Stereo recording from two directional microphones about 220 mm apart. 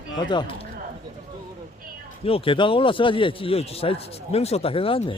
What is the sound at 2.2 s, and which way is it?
Speech, 25° left (ahead or behind).